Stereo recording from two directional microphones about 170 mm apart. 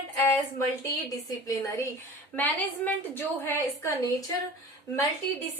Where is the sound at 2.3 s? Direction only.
10° left (ahead or behind).